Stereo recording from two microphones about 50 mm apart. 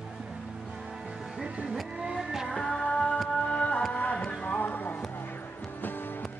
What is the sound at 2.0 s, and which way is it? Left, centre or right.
Music, centre.